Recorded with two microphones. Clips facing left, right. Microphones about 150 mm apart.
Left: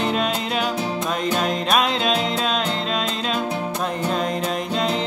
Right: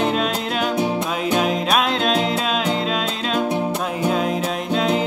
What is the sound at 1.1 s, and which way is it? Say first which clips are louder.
Music: right 2 dB; 5° right (ahead or behind).